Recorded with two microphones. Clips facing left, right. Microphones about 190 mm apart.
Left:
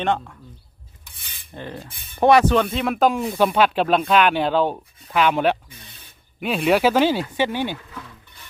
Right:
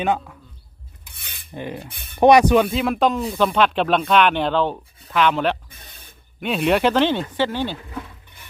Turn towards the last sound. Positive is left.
turn(degrees=15)  # may be behind; listen again after turning